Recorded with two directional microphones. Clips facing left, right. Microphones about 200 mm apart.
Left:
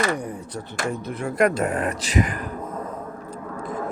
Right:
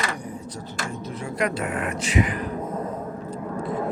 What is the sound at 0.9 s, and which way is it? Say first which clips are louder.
Speech: left 7 dB; 55° left (ahead or behind).